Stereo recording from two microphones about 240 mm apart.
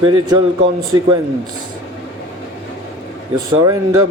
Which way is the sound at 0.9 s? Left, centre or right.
Right.